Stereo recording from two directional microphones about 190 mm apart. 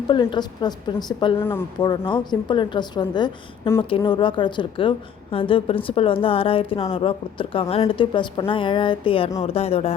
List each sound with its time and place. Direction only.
0.1 s a woman's voice: 25° left (ahead or behind)
1.4 s speech: 10° left (ahead or behind)
1.9 s a woman's voice: 25° left (ahead or behind)